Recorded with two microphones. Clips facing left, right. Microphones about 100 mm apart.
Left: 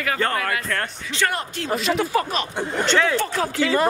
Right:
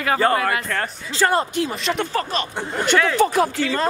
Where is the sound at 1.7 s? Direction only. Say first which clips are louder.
Left 2 dB; centre (ahead or behind).